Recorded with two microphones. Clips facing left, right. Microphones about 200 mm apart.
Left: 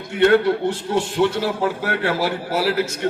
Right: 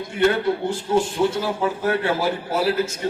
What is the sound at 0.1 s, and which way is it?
A man's voice, 70° left (ahead or behind).